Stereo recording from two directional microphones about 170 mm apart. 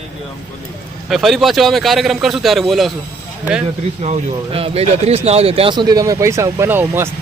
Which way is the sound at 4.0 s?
40° right (ahead or behind).